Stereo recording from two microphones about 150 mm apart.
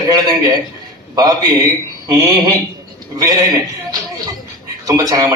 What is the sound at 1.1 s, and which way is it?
Speech, 25° right (ahead or behind).